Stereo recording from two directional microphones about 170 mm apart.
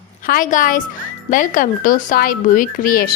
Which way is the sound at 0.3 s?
50° left (ahead or behind).